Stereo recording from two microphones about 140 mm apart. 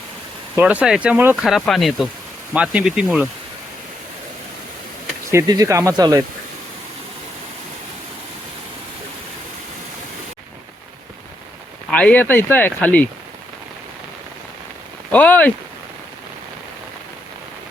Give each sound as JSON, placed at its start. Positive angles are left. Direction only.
{"t": 0.5, "sound": "speech", "side_deg": -10}
{"t": 1.5, "sound": "speech", "side_deg": 0}
{"t": 5.3, "sound": "speech", "side_deg": -25}
{"t": 11.9, "sound": "speech", "side_deg": 10}
{"t": 15.1, "sound": "speech", "side_deg": 10}